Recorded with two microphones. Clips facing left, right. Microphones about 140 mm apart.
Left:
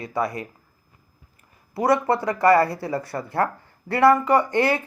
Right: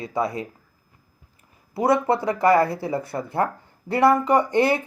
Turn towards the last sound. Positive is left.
turn(degrees=-15)  # may be behind; listen again after turning